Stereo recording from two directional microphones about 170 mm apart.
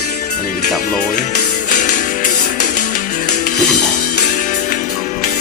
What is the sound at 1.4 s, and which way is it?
Music, 45° left (ahead or behind).